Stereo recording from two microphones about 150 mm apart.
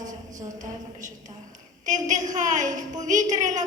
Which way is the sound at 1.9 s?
55° right (ahead or behind).